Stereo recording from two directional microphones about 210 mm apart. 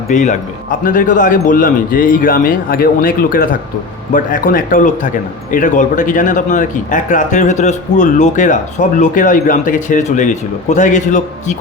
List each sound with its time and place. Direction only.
0.1 s speech: 35° left (ahead or behind)